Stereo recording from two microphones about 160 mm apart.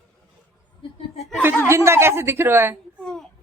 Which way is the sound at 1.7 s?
15° right (ahead or behind).